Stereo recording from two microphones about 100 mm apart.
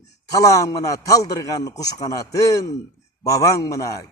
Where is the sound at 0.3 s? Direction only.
35° left (ahead or behind).